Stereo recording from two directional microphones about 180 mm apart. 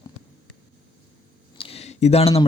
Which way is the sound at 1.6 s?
35° left (ahead or behind).